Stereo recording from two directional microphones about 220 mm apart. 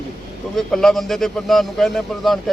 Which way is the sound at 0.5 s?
Centre (ahead or behind).